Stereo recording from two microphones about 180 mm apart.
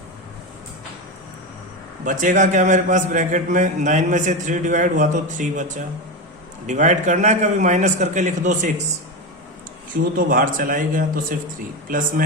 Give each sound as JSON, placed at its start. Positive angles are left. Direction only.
{"t": 2.0, "sound": "a man's voice", "side_deg": -45}
{"t": 10.2, "sound": "a man's voice", "side_deg": -50}